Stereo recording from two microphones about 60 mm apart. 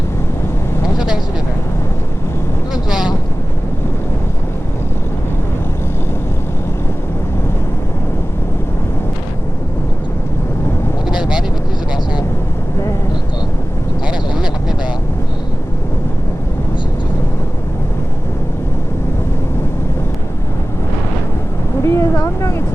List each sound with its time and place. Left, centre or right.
0.9 s vehicle: centre
11.1 s vehicle: centre
14.1 s vehicle: centre
21.8 s a sound: left